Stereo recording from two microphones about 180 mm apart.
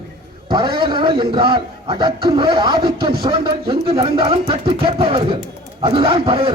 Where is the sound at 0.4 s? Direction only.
25° right (ahead or behind).